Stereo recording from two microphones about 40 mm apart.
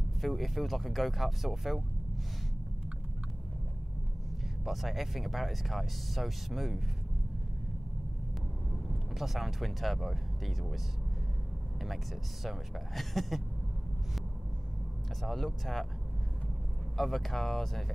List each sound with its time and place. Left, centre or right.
0.2 s speech: centre
4.6 s speech: centre
9.2 s speech: centre
12.4 s speech: centre
15.2 s speech: centre
16.9 s speech: centre